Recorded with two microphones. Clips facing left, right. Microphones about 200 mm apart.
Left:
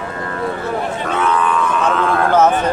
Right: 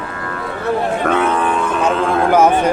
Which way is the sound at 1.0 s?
55° right (ahead or behind).